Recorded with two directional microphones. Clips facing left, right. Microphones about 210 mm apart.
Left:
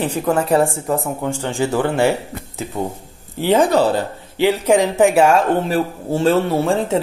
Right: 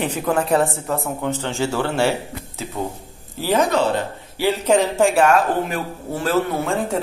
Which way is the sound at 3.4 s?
25° left (ahead or behind).